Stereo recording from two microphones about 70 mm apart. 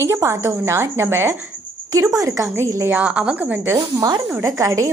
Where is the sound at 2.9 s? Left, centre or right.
Centre.